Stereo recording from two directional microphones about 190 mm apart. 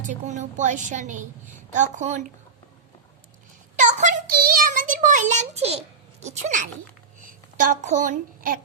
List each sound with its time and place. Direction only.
0.0 s a woman's voice: 40° right (ahead or behind)
3.8 s a sound: 40° right (ahead or behind)
7.6 s a child's voice: 40° right (ahead or behind)